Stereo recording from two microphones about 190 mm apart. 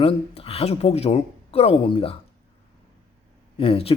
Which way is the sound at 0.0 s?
30° left (ahead or behind).